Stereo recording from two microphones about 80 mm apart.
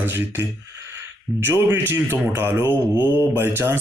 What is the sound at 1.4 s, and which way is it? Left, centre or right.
Speech, right.